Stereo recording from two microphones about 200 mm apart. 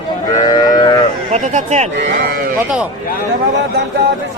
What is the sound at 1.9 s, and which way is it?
Speech, 50° right (ahead or behind).